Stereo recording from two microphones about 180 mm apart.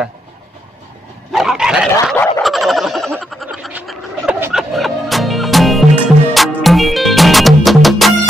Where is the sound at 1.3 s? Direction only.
Centre (ahead or behind).